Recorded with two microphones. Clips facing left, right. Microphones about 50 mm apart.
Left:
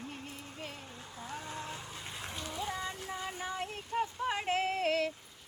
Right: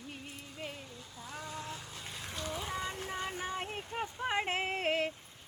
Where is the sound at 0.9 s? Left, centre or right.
Left.